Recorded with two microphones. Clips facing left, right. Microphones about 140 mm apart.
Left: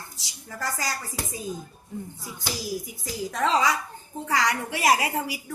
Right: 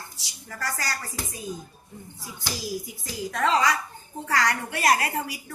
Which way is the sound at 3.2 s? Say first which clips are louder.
Even; 10° left (ahead or behind).